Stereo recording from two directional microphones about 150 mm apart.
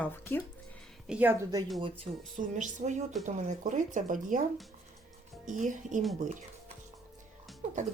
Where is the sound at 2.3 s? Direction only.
55° right (ahead or behind).